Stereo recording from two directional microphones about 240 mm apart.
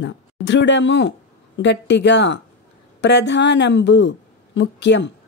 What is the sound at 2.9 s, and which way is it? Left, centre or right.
Speech, left.